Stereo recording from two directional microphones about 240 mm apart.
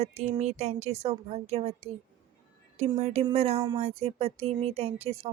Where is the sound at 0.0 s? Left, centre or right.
Right.